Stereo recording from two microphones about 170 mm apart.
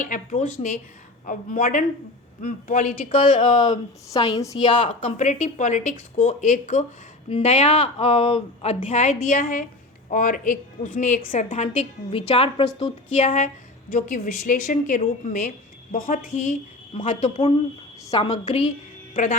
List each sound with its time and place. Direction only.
0.0 s a woman's voice: 50° left (ahead or behind)
4.6 s a woman's voice: 45° left (ahead or behind)
19.1 s speech: 50° left (ahead or behind)